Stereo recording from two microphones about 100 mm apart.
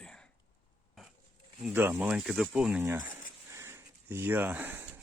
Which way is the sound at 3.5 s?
25° right (ahead or behind).